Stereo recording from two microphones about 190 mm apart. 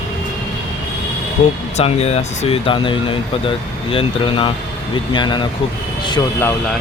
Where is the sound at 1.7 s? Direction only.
35° left (ahead or behind).